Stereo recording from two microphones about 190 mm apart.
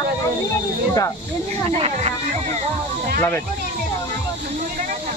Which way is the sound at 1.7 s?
30° right (ahead or behind).